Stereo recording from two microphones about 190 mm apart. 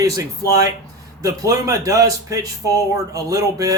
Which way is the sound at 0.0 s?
15° right (ahead or behind).